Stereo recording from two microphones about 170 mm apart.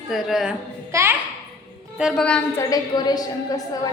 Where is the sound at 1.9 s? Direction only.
Centre (ahead or behind).